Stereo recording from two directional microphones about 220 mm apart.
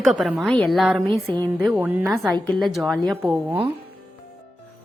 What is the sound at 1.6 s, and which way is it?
A woman's voice, 10° right (ahead or behind).